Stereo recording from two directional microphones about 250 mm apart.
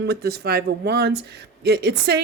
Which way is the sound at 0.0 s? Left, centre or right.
Right.